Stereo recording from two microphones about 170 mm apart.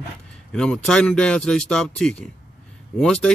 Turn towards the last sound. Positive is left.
turn(degrees=5)  # may be behind; listen again after turning